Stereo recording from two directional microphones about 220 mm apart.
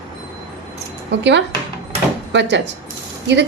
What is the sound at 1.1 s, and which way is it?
A woman's voice, 55° right (ahead or behind).